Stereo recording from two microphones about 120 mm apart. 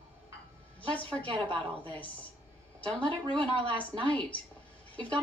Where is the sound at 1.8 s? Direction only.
10° left (ahead or behind).